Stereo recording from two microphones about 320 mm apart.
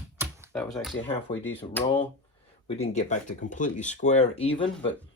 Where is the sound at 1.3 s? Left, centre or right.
Centre.